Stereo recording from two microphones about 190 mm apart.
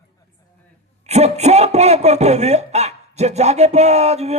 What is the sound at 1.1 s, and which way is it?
A man's voice, 35° right (ahead or behind).